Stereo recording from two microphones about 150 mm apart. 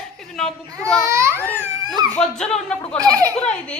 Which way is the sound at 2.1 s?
5° left (ahead or behind).